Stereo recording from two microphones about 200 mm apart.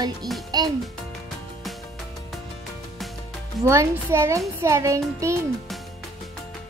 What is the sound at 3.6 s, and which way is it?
A child's voice, 15° right (ahead or behind).